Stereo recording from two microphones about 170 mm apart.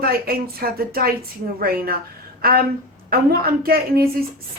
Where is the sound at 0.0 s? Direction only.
60° right (ahead or behind).